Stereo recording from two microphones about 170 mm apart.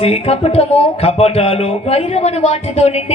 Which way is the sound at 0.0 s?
35° left (ahead or behind).